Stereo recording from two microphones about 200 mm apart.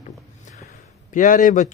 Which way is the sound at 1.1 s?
40° left (ahead or behind).